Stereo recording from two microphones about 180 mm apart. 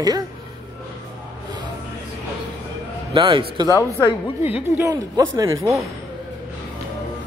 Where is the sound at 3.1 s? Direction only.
25° right (ahead or behind).